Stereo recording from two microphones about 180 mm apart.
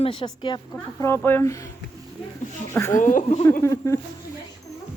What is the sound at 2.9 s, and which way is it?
Speech, 45° left (ahead or behind).